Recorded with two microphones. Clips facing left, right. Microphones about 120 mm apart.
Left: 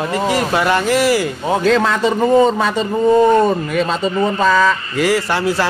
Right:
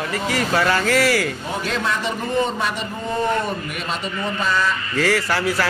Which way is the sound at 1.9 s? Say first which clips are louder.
Left 9 dB; 90° left.